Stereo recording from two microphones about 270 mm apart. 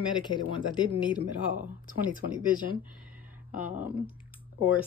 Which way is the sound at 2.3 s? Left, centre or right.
Centre.